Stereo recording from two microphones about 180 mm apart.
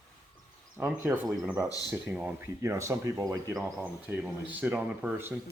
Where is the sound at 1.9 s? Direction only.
10° right (ahead or behind).